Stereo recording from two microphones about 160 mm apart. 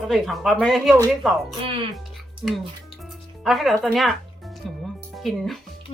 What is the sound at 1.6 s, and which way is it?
Speech, 35° right (ahead or behind).